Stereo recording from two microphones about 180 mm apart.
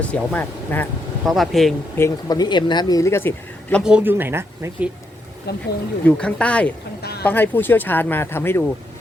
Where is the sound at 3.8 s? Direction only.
10° right (ahead or behind).